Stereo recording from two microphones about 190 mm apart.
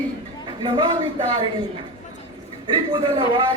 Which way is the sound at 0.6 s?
25° right (ahead or behind).